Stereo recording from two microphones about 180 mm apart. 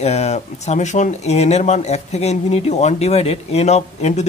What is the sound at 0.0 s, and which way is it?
A man's voice, 35° left (ahead or behind).